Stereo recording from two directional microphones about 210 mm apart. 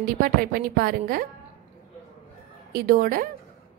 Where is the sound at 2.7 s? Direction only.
45° right (ahead or behind).